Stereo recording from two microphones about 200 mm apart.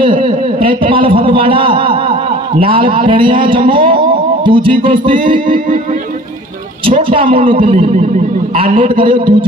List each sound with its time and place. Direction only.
0.0 s a man's voice: 25° right (ahead or behind)
6.9 s a man's voice: 25° right (ahead or behind)